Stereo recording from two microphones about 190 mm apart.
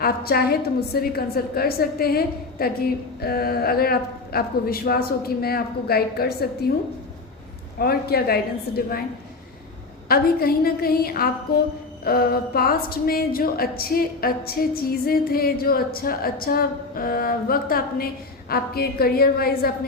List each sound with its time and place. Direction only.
0.0 s a woman's voice: 55° left (ahead or behind)
7.8 s a woman's voice: 55° left (ahead or behind)
10.1 s a woman's voice: 50° left (ahead or behind)